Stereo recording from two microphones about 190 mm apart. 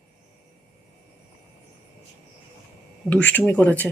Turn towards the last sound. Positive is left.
turn(degrees=10)  # may be behind; listen again after turning